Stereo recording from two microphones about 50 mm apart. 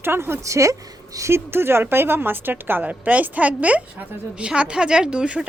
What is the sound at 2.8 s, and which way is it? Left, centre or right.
Speech, right.